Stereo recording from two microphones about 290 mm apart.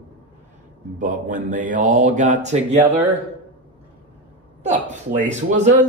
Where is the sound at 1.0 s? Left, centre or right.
Right.